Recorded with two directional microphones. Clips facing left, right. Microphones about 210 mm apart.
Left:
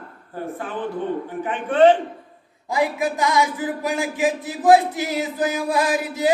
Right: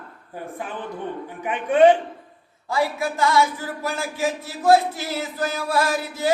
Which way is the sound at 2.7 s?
15° left (ahead or behind).